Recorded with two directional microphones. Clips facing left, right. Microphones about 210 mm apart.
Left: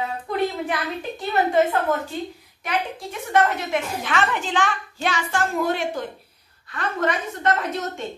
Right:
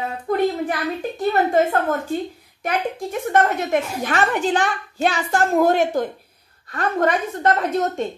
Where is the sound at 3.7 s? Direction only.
40° right (ahead or behind).